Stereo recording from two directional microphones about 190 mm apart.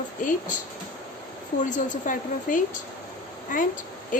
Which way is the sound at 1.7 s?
40° left (ahead or behind).